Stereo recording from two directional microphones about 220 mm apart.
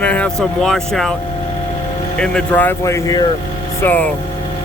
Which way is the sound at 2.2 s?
5° left (ahead or behind).